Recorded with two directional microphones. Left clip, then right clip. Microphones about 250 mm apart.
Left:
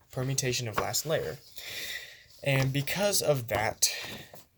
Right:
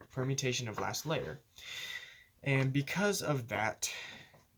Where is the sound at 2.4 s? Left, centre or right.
Left.